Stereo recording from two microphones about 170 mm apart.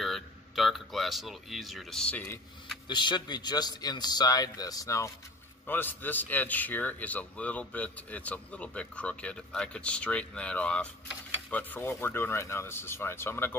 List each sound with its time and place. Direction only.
0.0 s speech: centre (ahead or behind)
2.9 s a man's voice: 25° left (ahead or behind)